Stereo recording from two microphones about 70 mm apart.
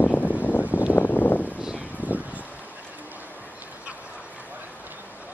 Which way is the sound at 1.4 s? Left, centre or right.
Centre.